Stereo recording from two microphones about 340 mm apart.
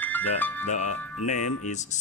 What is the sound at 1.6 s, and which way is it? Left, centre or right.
Speech, left.